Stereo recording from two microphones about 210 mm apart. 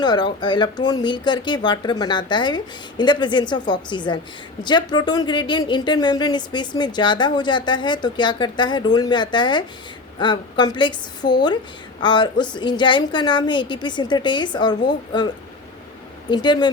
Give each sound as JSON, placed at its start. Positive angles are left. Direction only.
{"t": 0.0, "sound": "a woman's voice", "side_deg": 20}
{"t": 16.3, "sound": "a woman's voice", "side_deg": 20}